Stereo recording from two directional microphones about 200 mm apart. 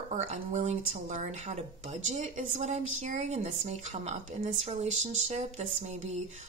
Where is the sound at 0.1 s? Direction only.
35° right (ahead or behind).